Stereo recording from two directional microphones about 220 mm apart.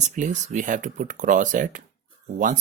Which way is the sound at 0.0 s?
35° right (ahead or behind).